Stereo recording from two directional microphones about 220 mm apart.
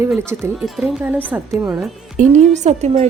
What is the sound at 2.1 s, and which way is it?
Speech, 30° right (ahead or behind).